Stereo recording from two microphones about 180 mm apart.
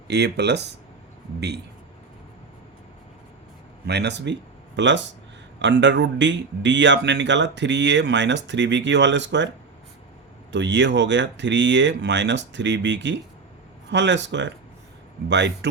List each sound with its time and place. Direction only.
0.1 s speech: 70° right (ahead or behind)
3.8 s speech: 70° right (ahead or behind)
4.8 s speech: 90° right
5.5 s speech: 80° right
10.5 s speech: 80° right